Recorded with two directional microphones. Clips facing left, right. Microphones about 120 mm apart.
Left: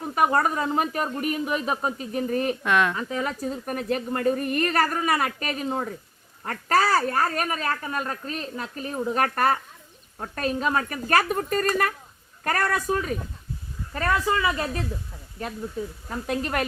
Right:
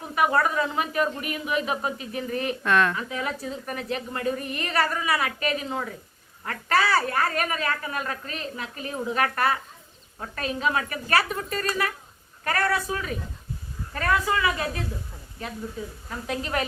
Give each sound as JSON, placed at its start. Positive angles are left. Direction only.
{"t": 0.2, "sound": "speech", "side_deg": 40}
{"t": 2.6, "sound": "speech", "side_deg": 15}
{"t": 2.9, "sound": "a woman's voice", "side_deg": 35}
{"t": 13.9, "sound": "speech", "side_deg": 30}
{"t": 16.2, "sound": "a woman's voice", "side_deg": 50}